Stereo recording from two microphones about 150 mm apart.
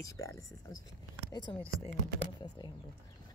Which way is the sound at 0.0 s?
20° left (ahead or behind).